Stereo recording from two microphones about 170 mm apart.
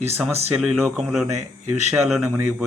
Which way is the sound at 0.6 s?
5° right (ahead or behind).